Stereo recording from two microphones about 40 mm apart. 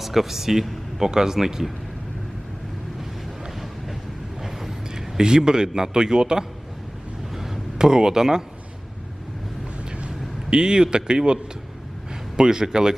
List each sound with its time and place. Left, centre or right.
0.0 s speech: centre
4.4 s speech: centre
7.3 s a sound: centre
10.5 s a man's voice: centre
12.4 s speech: centre